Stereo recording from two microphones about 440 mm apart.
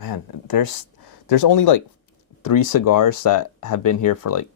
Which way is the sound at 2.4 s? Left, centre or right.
Left.